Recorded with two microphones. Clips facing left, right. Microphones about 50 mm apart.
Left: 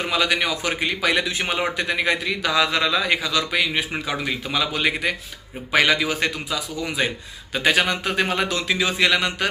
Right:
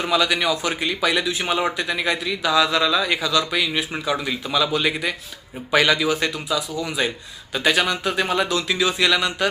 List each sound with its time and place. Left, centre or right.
0.0 s a man's voice: left